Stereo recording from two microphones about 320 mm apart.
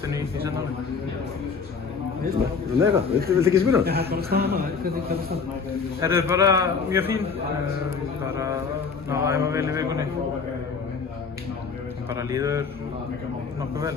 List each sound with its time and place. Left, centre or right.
0.1 s a man's voice: centre
2.8 s a man's voice: centre
3.8 s a man's voice: right
5.9 s a man's voice: centre
12.1 s a man's voice: centre